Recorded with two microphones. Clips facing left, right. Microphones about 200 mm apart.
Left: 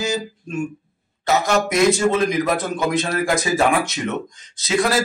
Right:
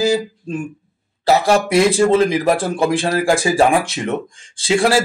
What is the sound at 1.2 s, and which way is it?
A man's voice, 30° right (ahead or behind).